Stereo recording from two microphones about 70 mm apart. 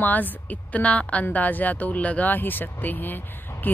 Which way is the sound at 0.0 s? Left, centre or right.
Left.